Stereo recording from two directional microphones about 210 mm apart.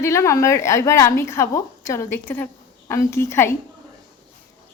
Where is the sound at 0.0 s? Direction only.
15° left (ahead or behind).